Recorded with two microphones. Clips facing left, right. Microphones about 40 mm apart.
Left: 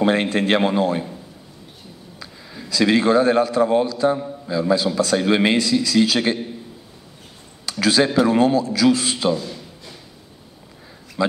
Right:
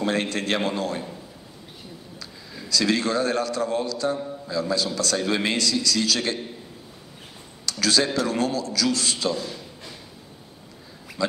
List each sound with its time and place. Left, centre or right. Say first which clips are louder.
0.0 s a man's voice: left 6 dB; left
2.7 s a man's voice: left 7 dB; left
7.6 s a man's voice: left 5 dB; left
9.4 s a sound: left 1 dB; centre
11.2 s speech: left 5 dB; left